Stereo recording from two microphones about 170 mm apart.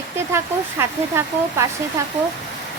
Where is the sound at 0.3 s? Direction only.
15° right (ahead or behind).